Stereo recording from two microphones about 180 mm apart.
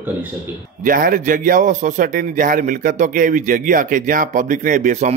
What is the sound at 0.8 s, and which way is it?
A man's voice, 50° right (ahead or behind).